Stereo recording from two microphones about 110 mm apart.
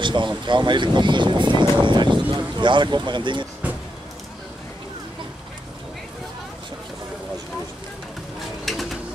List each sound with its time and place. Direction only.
0.0 s speech: 45° right (ahead or behind)
8.4 s bird: centre (ahead or behind)